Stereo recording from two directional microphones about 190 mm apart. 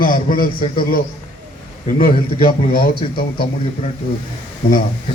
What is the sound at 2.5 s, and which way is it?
Speech, 50° left (ahead or behind).